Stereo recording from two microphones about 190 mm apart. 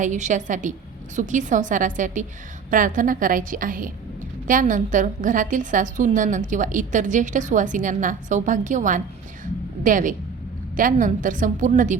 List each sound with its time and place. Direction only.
0.0 s a woman's voice: 40° right (ahead or behind)